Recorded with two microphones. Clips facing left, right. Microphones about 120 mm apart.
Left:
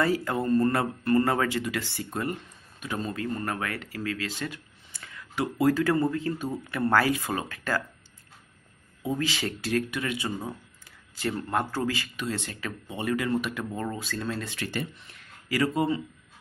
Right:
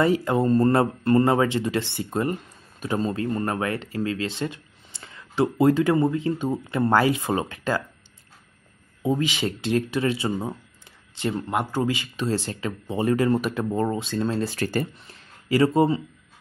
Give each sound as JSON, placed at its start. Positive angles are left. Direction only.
{"t": 0.0, "sound": "speech", "side_deg": -20}
{"t": 9.0, "sound": "speech", "side_deg": -20}
{"t": 12.2, "sound": "speech", "side_deg": -35}
{"t": 15.4, "sound": "speech", "side_deg": -25}